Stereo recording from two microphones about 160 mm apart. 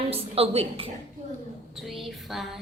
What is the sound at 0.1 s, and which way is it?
Speech, 40° right (ahead or behind).